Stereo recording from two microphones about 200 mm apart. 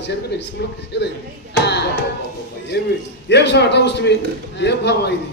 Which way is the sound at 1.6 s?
55° left (ahead or behind).